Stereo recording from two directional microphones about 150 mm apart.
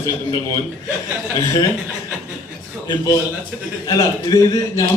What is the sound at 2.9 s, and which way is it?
A man's voice, 20° left (ahead or behind).